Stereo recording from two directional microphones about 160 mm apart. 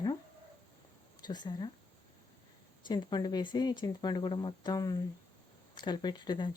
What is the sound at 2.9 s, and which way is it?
Speech, 25° left (ahead or behind).